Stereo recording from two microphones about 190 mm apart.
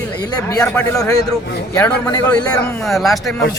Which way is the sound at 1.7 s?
15° left (ahead or behind).